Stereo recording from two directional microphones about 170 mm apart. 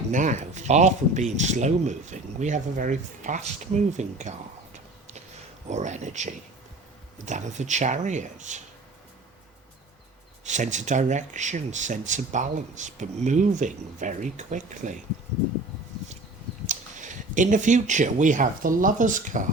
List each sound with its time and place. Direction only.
0.1 s speech: 45° right (ahead or behind)
10.4 s speech: 45° right (ahead or behind)
16.6 s speech: 45° right (ahead or behind)